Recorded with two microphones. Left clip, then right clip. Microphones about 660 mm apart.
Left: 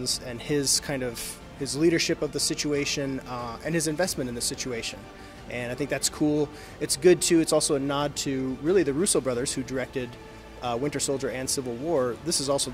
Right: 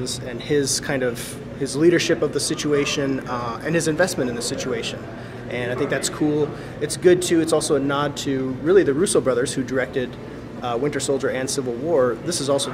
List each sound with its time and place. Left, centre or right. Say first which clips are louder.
0.0 s speech: right 3 dB; left
0.6 s speech: right 5 dB; left
10.6 s speech: right 5 dB; left